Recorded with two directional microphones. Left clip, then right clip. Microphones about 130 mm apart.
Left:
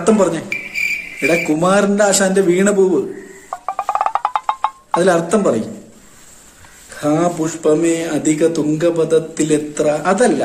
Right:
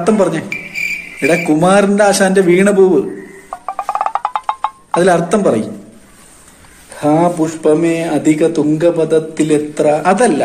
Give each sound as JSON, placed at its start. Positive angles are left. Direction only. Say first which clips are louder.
{"t": 0.0, "sound": "speech", "louder": "right 1 dB", "side_deg": 20}
{"t": 0.5, "sound": "cricket", "louder": "even", "side_deg": 0}
{"t": 1.6, "sound": "a man's voice", "louder": "right 4 dB", "side_deg": 15}
{"t": 3.4, "sound": "music", "louder": "even", "side_deg": 0}
{"t": 4.9, "sound": "a man's voice", "louder": "right 3 dB", "side_deg": 15}
{"t": 7.0, "sound": "speech", "louder": "right 4 dB", "side_deg": 20}